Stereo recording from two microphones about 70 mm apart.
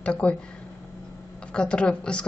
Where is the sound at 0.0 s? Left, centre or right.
Centre.